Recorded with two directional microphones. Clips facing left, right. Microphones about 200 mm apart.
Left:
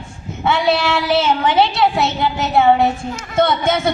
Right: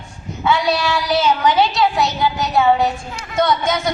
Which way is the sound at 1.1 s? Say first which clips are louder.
Even; 25° left (ahead or behind).